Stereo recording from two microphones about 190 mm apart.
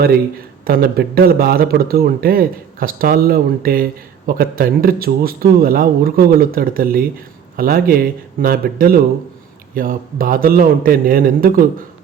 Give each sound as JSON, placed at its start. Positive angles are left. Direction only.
{"t": 0.6, "sound": "speech", "side_deg": -50}